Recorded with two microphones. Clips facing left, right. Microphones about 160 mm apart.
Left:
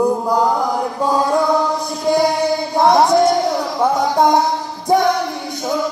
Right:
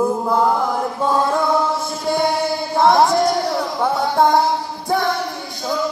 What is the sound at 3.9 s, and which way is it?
Music, 15° left (ahead or behind).